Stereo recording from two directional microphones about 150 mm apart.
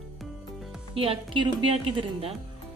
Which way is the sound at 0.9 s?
35° right (ahead or behind).